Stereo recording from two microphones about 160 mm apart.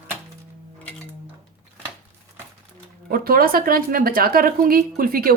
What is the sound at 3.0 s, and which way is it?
A woman's voice, 65° right (ahead or behind).